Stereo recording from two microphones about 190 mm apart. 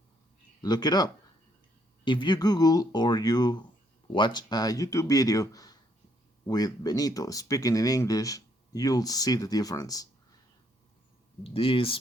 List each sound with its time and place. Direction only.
0.6 s speech: 20° left (ahead or behind)
11.4 s speech: 30° left (ahead or behind)